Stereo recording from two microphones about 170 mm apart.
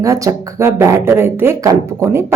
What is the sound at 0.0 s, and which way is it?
Speech, 20° right (ahead or behind).